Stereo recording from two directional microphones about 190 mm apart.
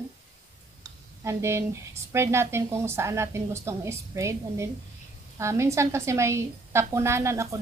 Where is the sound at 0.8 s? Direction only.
15° right (ahead or behind).